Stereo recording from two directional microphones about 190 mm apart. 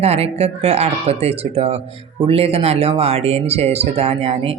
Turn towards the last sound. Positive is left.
turn(degrees=-30)  # may be behind; listen again after turning